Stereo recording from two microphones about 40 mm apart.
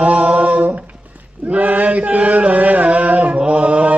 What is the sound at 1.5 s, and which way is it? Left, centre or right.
Chant, right.